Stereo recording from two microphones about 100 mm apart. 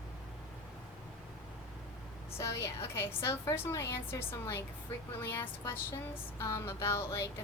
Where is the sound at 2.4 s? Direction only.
30° left (ahead or behind).